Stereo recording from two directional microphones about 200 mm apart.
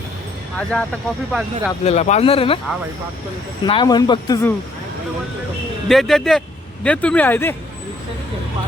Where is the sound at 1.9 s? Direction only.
35° left (ahead or behind).